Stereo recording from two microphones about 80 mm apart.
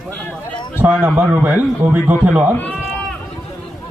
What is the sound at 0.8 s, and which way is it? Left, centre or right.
A man's voice, right.